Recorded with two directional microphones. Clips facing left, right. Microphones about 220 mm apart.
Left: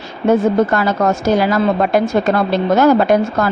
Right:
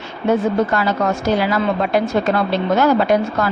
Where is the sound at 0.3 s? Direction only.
45° left (ahead or behind).